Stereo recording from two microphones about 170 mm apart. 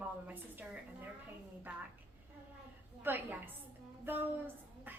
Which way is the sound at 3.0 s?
10° right (ahead or behind).